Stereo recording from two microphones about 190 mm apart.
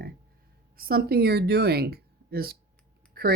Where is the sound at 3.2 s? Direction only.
50° right (ahead or behind).